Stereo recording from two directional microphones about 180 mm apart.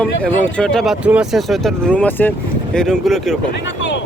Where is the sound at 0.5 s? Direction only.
5° left (ahead or behind).